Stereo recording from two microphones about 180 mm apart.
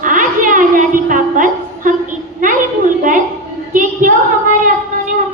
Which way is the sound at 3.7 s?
45° right (ahead or behind).